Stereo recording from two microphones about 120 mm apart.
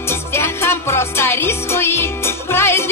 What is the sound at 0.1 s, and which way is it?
Music, 20° left (ahead or behind).